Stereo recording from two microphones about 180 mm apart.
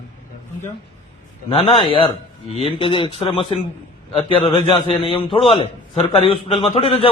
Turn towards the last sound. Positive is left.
turn(degrees=30)  # may be behind; listen again after turning